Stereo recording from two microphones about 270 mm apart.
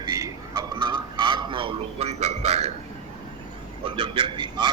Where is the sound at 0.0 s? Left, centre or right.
Centre.